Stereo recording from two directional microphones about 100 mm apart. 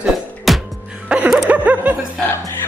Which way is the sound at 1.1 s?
10° right (ahead or behind).